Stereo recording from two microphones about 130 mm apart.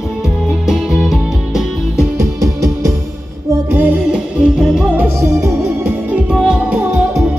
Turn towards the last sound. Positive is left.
turn(degrees=-10)  # may be behind; listen again after turning